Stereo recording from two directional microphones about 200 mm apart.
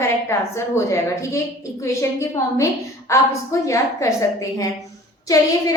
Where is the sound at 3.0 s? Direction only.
15° left (ahead or behind).